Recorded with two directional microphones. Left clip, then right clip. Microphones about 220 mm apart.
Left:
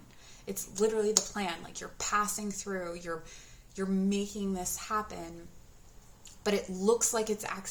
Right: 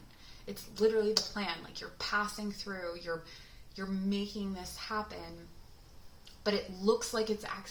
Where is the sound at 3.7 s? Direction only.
40° left (ahead or behind).